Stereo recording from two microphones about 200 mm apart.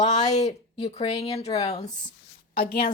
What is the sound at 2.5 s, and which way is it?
Speech, 45° left (ahead or behind).